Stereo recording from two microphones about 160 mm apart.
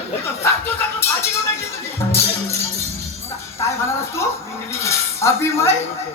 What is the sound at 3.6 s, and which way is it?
Music, 15° left (ahead or behind).